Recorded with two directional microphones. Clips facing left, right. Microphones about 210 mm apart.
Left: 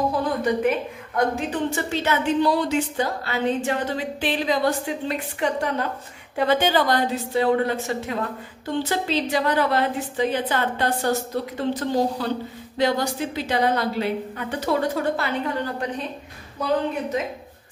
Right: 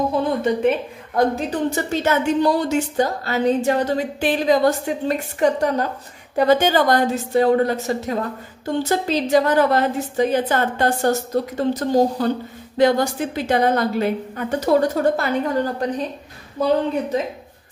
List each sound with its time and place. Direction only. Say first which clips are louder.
0.1 s a woman's voice: right 3 dB; 25° right (ahead or behind); by 15.7 s 40° right (ahead or behind)